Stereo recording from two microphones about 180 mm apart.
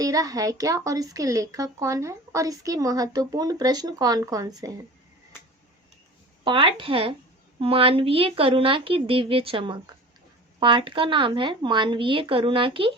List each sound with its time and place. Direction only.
0.0 s a woman's voice: 20° right (ahead or behind)
6.4 s a woman's voice: 25° right (ahead or behind)